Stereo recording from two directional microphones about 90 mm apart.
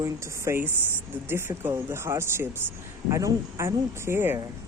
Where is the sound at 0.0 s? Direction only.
30° right (ahead or behind).